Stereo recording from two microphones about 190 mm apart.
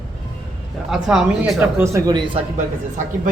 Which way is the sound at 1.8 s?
20° right (ahead or behind).